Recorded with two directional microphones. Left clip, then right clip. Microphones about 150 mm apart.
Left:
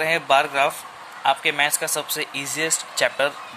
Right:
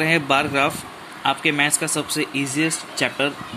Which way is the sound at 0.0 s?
10° left (ahead or behind).